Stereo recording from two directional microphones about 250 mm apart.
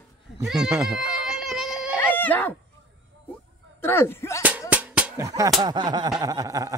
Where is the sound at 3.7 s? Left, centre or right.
Centre.